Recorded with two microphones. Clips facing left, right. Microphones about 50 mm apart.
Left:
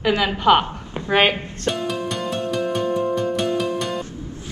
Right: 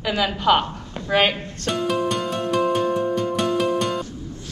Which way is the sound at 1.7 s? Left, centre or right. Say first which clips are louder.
Right 2 dB; centre.